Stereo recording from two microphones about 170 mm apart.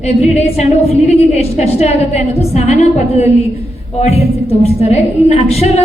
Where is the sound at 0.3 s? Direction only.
40° left (ahead or behind).